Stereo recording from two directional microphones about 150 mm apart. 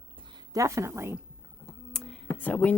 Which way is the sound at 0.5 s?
20° right (ahead or behind).